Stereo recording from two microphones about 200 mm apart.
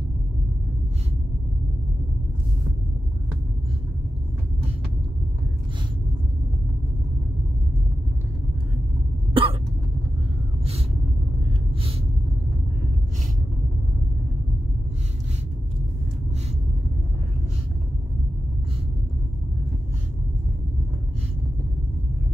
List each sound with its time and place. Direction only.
9.3 s cough: 25° right (ahead or behind)